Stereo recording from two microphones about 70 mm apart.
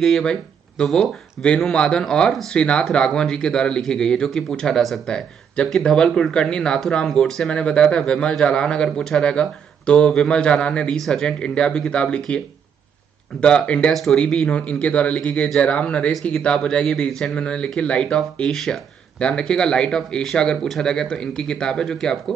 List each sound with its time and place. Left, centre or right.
0.0 s speech: centre
13.4 s speech: centre